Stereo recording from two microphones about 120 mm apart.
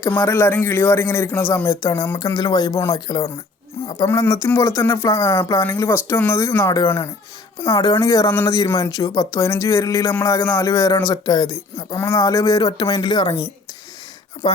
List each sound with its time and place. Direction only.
0.1 s speech: 15° left (ahead or behind)
2.1 s speech: 35° left (ahead or behind)